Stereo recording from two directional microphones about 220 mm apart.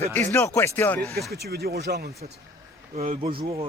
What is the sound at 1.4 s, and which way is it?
Speech, 45° right (ahead or behind).